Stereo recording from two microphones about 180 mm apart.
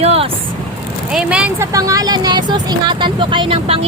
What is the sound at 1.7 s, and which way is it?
Speech, 20° right (ahead or behind).